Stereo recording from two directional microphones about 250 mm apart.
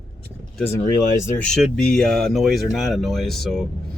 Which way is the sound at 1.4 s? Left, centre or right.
Centre.